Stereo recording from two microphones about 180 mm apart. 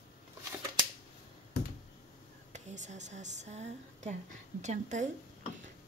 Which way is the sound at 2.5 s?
40° right (ahead or behind).